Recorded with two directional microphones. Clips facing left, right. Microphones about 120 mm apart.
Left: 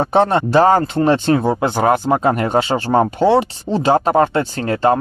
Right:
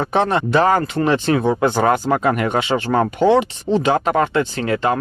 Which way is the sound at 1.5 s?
20° left (ahead or behind).